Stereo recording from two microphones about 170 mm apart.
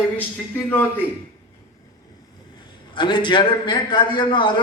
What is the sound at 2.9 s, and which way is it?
A man's voice, 30° left (ahead or behind).